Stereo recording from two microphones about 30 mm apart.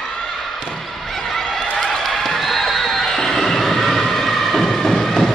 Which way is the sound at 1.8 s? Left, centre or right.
Centre.